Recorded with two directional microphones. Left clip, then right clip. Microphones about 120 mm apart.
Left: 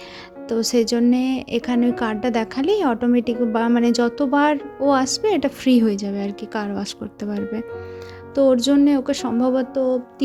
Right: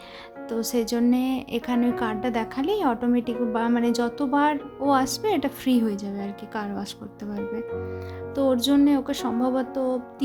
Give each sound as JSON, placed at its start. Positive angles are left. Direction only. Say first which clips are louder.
{"t": 0.4, "sound": "speech", "louder": "left 7 dB", "side_deg": 35}
{"t": 8.4, "sound": "music", "louder": "left 5 dB", "side_deg": 25}